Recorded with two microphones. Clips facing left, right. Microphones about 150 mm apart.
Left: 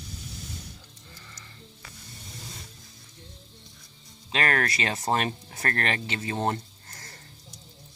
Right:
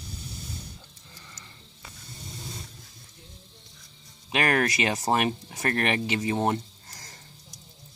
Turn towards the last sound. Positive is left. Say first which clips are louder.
# left 1 dB
turn(degrees=-15)  # may be behind; listen again after turning